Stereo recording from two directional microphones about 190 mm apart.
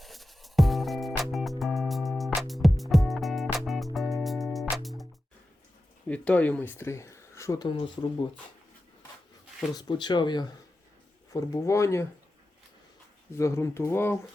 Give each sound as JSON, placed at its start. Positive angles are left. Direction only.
{"t": 0.0, "sound": "music", "side_deg": 0}
{"t": 6.1, "sound": "speech", "side_deg": 5}
{"t": 9.7, "sound": "speech", "side_deg": 20}
{"t": 13.3, "sound": "speech", "side_deg": 15}